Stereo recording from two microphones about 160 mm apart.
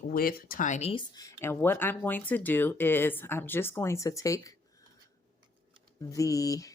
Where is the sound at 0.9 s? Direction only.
25° left (ahead or behind).